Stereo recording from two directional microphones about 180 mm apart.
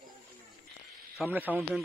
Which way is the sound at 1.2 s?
10° right (ahead or behind).